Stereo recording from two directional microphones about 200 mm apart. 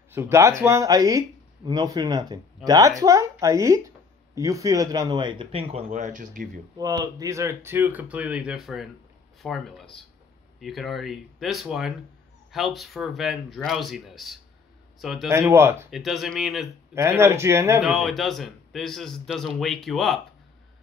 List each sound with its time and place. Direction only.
0.1 s speech: 15° right (ahead or behind); by 6.5 s 40° right (ahead or behind)
6.8 s a man's voice: 20° right (ahead or behind); by 15.2 s centre (ahead or behind)
15.2 s speech: 15° right (ahead or behind)
15.9 s a man's voice: centre (ahead or behind)
16.9 s speech: 10° right (ahead or behind)
17.8 s a man's voice: centre (ahead or behind)